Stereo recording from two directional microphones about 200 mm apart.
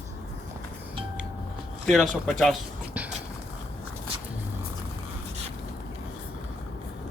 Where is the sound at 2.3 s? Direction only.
Centre (ahead or behind).